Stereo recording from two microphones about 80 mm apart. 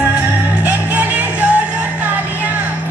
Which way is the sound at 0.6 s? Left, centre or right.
Centre.